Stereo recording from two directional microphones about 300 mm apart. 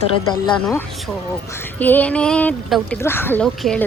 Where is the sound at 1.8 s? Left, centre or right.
Centre.